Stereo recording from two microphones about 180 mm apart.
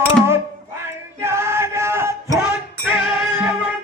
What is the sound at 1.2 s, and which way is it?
Male singing, 15° right (ahead or behind).